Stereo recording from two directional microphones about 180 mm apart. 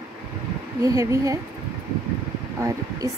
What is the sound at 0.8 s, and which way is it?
Speech, 20° right (ahead or behind).